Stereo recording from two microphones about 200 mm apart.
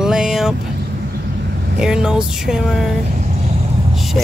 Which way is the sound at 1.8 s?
5° right (ahead or behind).